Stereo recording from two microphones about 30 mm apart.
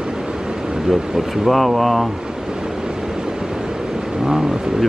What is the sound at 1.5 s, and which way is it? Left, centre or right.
Speech, centre.